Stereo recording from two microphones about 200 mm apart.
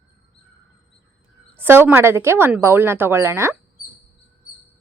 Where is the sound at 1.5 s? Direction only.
10° right (ahead or behind).